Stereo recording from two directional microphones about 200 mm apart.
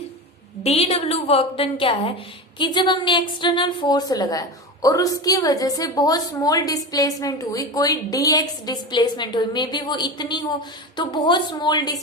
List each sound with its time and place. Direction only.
0.6 s a woman's voice: 30° left (ahead or behind)